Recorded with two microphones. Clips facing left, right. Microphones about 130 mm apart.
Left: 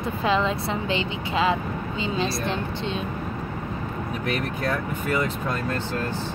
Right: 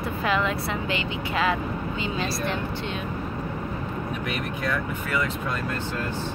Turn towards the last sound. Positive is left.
turn(degrees=40)  # may be behind; listen again after turning